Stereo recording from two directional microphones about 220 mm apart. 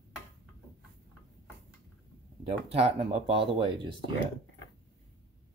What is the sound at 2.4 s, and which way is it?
Speech, 25° right (ahead or behind).